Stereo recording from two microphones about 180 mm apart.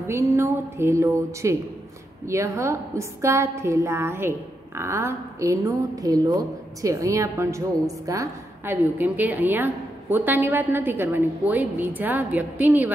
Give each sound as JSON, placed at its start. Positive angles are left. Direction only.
{"t": 0.0, "sound": "a woman's voice", "side_deg": -15}